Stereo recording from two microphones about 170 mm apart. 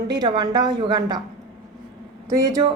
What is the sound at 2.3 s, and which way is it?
Speech, 20° right (ahead or behind).